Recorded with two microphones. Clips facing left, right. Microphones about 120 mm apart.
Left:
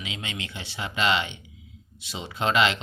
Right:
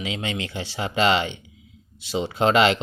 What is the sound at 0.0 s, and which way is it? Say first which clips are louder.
Speech: right 7 dB; 35° right (ahead or behind).